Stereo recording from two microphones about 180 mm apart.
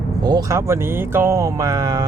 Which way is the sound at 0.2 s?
20° right (ahead or behind).